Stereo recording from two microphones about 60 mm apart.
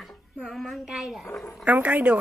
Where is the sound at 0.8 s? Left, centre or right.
Centre.